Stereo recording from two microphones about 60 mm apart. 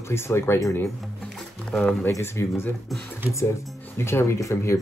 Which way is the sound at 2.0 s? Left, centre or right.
Left.